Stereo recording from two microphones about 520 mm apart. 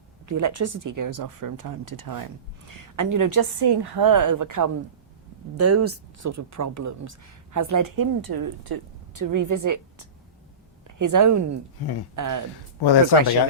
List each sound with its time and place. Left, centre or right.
0.3 s speech: right
12.8 s speech: left